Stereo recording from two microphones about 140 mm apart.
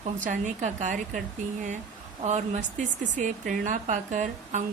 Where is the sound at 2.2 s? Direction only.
55° right (ahead or behind).